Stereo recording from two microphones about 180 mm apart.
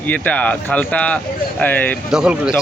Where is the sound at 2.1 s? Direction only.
5° right (ahead or behind).